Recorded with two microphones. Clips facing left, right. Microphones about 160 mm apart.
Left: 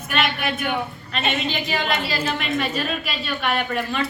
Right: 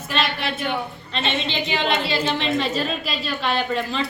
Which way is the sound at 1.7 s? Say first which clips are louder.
Right 4 dB; 30° right (ahead or behind).